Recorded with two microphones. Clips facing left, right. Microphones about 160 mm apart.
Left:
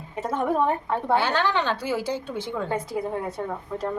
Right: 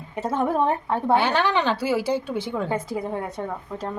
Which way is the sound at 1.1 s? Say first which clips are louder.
Right 2 dB; 15° right (ahead or behind).